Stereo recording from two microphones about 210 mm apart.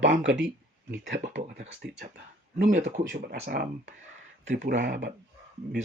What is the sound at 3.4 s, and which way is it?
Speech, 45° right (ahead or behind).